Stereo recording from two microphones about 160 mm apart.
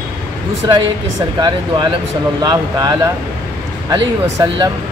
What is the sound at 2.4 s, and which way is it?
Speech, 25° right (ahead or behind).